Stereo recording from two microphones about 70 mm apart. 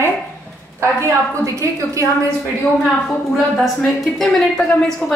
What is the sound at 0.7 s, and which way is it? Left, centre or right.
A woman's voice, right.